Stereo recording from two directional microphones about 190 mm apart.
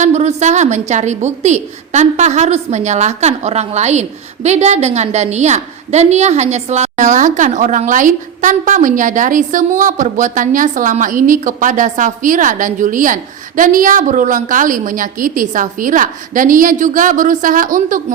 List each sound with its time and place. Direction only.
0.0 s a woman's voice: 35° right (ahead or behind)